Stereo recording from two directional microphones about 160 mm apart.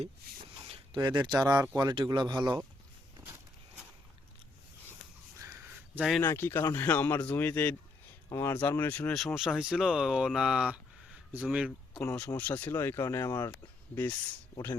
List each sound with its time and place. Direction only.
0.7 s speech: 30° right (ahead or behind)
5.4 s a sound: 20° right (ahead or behind)
6.0 s speech: centre (ahead or behind)
6.2 s speech: 15° left (ahead or behind); by 12.0 s centre (ahead or behind)
12.4 s speech: 10° left (ahead or behind)